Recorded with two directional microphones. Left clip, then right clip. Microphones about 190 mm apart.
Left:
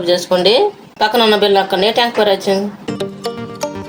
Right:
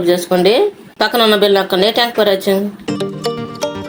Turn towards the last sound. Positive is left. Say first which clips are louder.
# right 3 dB
turn(degrees=0)  # may be behind; listen again after turning